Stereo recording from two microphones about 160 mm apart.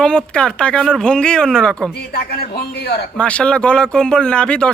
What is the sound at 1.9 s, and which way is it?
A man's voice, 85° left.